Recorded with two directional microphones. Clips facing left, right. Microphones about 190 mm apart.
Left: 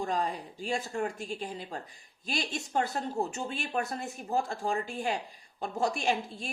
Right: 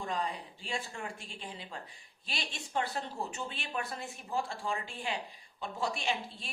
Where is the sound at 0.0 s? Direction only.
45° left (ahead or behind).